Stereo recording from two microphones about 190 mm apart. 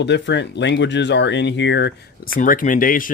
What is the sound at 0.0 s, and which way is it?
Speech, 65° left (ahead or behind).